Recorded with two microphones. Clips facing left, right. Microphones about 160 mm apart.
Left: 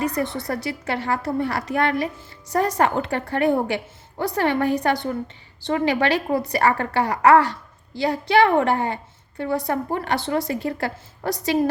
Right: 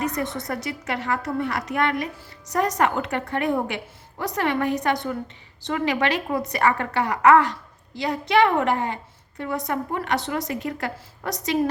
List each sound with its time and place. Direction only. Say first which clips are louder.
0.0 s speech: left 2 dB; 30° left (ahead or behind)